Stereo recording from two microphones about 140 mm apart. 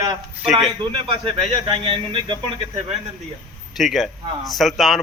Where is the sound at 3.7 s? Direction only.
Centre (ahead or behind).